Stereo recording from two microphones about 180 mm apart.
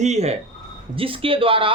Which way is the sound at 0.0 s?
40° right (ahead or behind).